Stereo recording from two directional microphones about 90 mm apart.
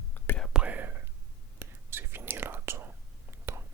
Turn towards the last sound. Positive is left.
turn(degrees=-30)  # may be behind; listen again after turning